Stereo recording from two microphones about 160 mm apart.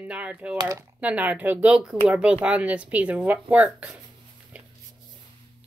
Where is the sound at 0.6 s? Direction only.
25° right (ahead or behind).